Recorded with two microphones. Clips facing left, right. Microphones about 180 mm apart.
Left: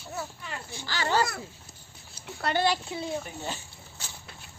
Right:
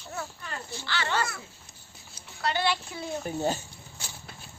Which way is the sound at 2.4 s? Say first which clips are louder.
Left 2 dB; 50° left (ahead or behind).